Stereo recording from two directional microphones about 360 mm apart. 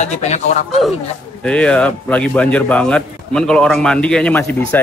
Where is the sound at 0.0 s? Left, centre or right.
Centre.